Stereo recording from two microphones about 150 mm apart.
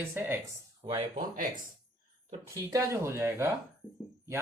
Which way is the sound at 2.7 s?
20° right (ahead or behind).